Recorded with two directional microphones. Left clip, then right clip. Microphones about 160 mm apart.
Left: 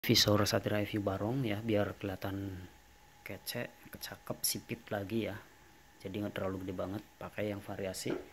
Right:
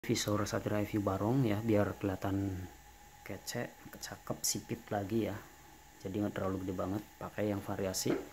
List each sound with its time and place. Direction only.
0.0 s speech: 20° left (ahead or behind)
0.8 s speech: 5° left (ahead or behind)